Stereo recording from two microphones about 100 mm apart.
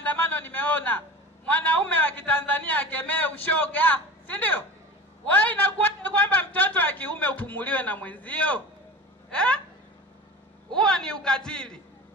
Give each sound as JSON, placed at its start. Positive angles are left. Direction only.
{"t": 0.0, "sound": "a sound", "side_deg": 15}
{"t": 5.2, "sound": "a man's voice", "side_deg": 15}
{"t": 10.7, "sound": "a man's voice", "side_deg": 10}